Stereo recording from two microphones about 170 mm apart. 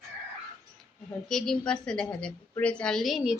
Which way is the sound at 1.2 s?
5° left (ahead or behind).